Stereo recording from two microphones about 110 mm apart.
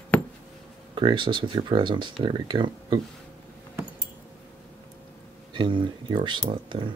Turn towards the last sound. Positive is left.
turn(degrees=-50)  # may be behind; listen again after turning